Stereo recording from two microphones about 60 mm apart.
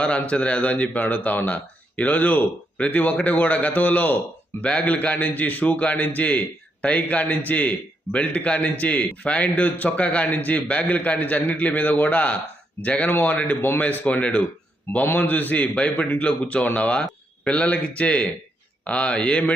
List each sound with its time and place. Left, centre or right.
0.0 s speech: centre
13.1 s a man's voice: left
13.8 s speech: left